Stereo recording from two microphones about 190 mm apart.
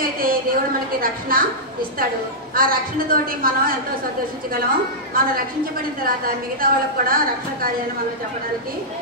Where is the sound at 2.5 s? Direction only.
50° right (ahead or behind).